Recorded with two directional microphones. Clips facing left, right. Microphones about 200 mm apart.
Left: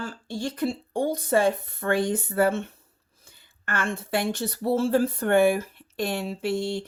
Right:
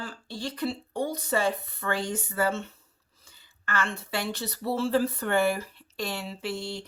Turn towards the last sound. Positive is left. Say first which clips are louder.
# left 7 dB
turn(degrees=55)  # may be behind; listen again after turning